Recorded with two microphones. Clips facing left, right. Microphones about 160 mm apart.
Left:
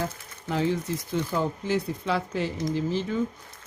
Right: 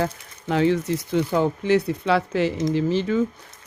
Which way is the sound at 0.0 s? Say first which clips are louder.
Right 6 dB; 75° right (ahead or behind).